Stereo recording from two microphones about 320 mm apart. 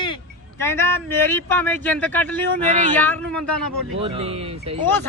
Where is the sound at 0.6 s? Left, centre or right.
Centre.